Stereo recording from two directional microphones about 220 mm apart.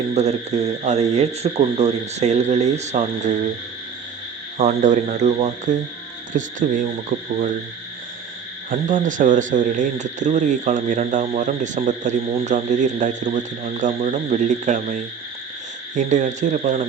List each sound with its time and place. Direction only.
0.1 s speech: 30° right (ahead or behind)
4.5 s speech: 30° right (ahead or behind)
7.1 s speech: 45° right (ahead or behind)
8.7 s speech: 35° right (ahead or behind)